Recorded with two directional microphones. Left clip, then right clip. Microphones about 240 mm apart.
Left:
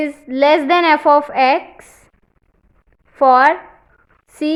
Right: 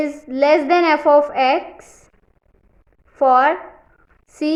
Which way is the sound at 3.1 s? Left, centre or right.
Centre.